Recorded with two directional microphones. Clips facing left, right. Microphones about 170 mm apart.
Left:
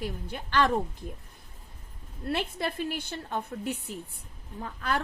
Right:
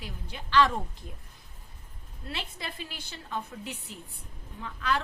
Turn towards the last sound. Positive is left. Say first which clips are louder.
# right 1 dB
turn(degrees=45)  # may be behind; listen again after turning